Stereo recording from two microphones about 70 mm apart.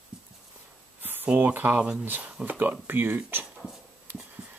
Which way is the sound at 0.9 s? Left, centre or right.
Right.